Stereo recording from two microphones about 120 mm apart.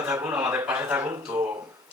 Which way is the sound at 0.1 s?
15° right (ahead or behind).